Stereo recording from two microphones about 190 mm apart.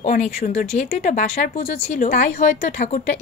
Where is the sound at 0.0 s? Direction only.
35° left (ahead or behind).